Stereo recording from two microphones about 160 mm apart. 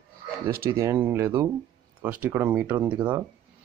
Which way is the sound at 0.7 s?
20° right (ahead or behind).